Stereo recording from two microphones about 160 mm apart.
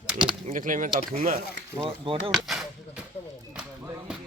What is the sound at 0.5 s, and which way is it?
Speech, 55° right (ahead or behind).